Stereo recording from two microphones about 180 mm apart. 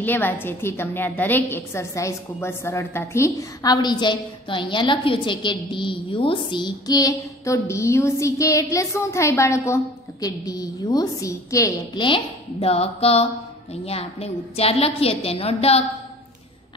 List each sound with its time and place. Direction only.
0.0 s a woman's voice: 10° left (ahead or behind); by 15.8 s 35° left (ahead or behind)